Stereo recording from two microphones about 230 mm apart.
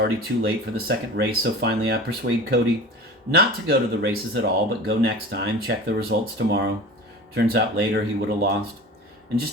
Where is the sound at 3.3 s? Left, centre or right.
Right.